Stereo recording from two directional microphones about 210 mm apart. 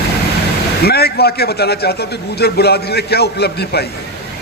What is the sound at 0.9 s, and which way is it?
Speech, 50° left (ahead or behind).